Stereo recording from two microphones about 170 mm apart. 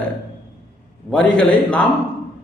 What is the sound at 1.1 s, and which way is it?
Speech, 5° left (ahead or behind).